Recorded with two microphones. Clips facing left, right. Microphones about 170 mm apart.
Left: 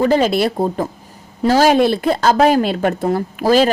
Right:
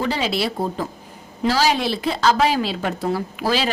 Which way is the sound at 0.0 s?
50° left (ahead or behind).